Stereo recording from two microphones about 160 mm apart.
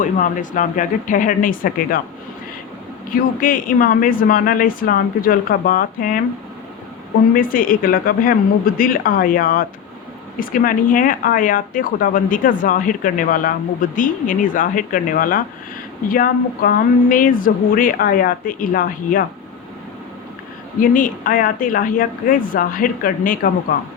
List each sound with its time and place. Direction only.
0.0 s a woman's voice: 55° left (ahead or behind)
3.1 s a woman's voice: 60° left (ahead or behind)
7.3 s a woman's voice: 60° left (ahead or behind)
20.9 s a woman's voice: 60° left (ahead or behind)